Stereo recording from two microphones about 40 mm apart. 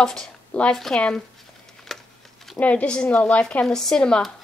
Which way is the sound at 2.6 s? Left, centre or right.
Left.